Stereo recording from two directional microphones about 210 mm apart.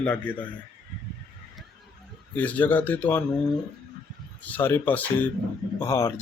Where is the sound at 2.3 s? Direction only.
5° left (ahead or behind).